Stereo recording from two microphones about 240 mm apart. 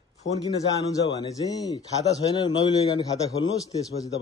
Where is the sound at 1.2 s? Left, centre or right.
Centre.